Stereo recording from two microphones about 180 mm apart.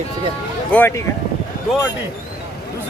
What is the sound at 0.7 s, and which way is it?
Speech, 10° left (ahead or behind).